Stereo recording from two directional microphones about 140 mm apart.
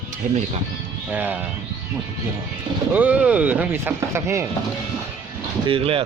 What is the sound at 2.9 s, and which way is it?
Speech, 10° right (ahead or behind).